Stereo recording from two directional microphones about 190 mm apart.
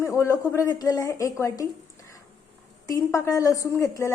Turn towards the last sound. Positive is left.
turn(degrees=15)  # may be behind; listen again after turning